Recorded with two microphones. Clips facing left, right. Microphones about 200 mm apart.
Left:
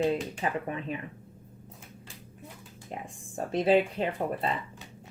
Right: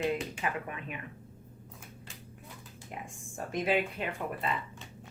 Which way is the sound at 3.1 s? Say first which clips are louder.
Left 6 dB; 35° left (ahead or behind).